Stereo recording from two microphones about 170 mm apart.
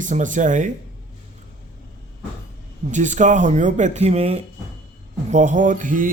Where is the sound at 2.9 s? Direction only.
45° right (ahead or behind).